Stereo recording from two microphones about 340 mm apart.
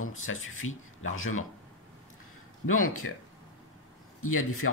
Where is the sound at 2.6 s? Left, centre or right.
Left.